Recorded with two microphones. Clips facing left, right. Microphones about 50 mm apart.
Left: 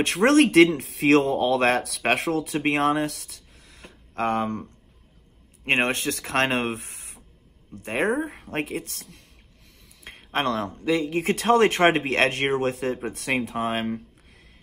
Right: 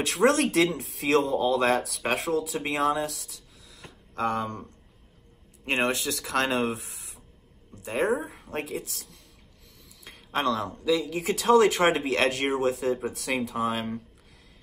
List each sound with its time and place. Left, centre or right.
0.0 s speech: left
0.7 s speech: left
5.7 s a man's voice: left